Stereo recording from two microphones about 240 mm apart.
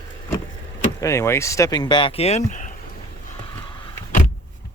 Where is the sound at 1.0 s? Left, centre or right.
Centre; by 2.7 s left.